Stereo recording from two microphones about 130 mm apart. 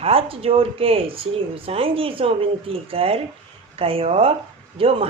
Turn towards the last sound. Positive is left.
turn(degrees=-45)  # may be behind; listen again after turning